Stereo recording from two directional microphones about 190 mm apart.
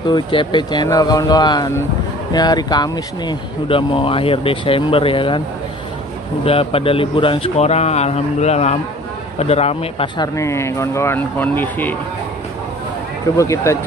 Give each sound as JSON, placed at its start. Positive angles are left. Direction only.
{"t": 0.1, "sound": "speech", "side_deg": 25}
{"t": 6.4, "sound": "speech", "side_deg": 30}
{"t": 13.4, "sound": "speech", "side_deg": 15}